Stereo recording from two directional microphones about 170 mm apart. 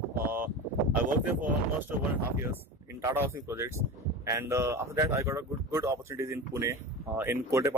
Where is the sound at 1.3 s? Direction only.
10° right (ahead or behind).